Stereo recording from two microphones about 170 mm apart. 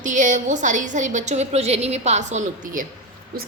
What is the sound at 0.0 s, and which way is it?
A woman's voice, 45° right (ahead or behind).